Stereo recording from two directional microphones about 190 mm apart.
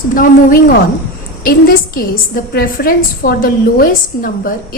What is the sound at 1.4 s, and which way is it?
A woman's voice, 50° left (ahead or behind).